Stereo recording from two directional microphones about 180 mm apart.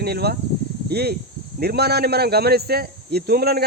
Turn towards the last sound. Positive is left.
turn(degrees=-60)  # may be behind; listen again after turning